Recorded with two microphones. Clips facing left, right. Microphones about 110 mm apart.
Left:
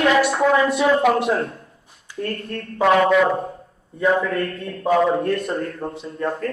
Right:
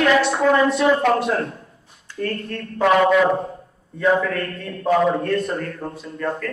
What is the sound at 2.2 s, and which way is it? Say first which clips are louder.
Speech: right 2 dB; 25° left (ahead or behind).